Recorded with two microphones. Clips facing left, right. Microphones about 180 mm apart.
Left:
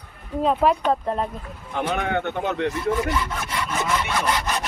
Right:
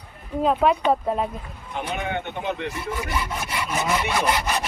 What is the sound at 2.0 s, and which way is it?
Speech, 60° left (ahead or behind).